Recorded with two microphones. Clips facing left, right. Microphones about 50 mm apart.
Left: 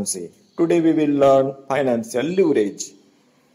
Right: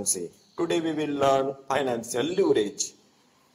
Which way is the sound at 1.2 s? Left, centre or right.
Left.